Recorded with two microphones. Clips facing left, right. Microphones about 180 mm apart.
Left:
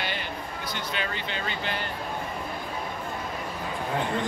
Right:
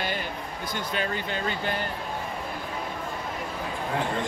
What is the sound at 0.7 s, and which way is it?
Speech, 45° right (ahead or behind).